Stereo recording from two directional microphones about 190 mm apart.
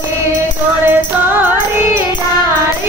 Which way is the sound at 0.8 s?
10° right (ahead or behind).